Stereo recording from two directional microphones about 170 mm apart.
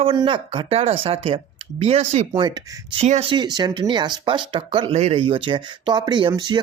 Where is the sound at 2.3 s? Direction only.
25° right (ahead or behind).